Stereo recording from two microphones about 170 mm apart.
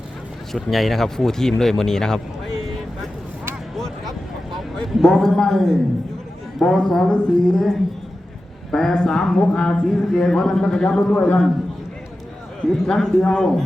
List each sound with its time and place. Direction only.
0.5 s speech: centre (ahead or behind)
3.8 s a sound: centre (ahead or behind)
4.8 s speech: centre (ahead or behind)
8.7 s speech: 5° left (ahead or behind)
12.7 s speech: centre (ahead or behind)